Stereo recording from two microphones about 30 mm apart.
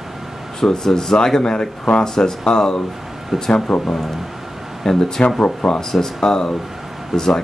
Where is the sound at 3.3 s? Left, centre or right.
Centre.